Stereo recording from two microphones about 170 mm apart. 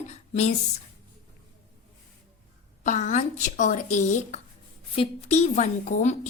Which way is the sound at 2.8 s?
45° left (ahead or behind).